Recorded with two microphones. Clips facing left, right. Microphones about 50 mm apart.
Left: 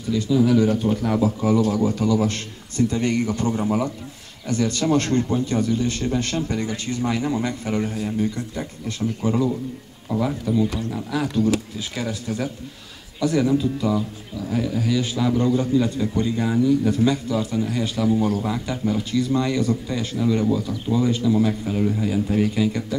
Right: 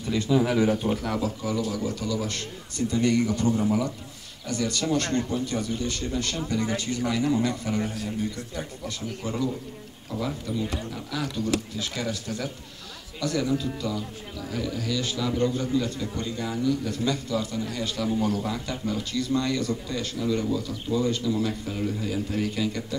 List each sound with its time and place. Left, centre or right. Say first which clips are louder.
0.1 s speech: left 4 dB; right
0.6 s speech: left 4 dB; centre
1.0 s speech: left 7 dB; centre
1.4 s a man's voice: left 9 dB; left
9.2 s a man's voice: left 7 dB; left